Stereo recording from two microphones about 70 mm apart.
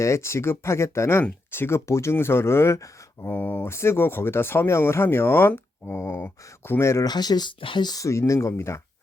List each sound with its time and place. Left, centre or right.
0.0 s speech: left
3.2 s speech: left
3.7 s speech: left
6.0 s speech: left
7.0 s speech: left
8.3 s speech: left